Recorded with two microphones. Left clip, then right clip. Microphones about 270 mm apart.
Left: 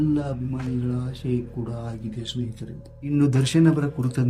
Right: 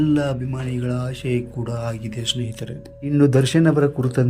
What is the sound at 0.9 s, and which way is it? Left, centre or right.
Speech, centre.